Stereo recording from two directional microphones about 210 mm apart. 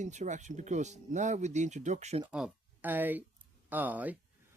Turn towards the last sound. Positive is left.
turn(degrees=-10)  # may be behind; listen again after turning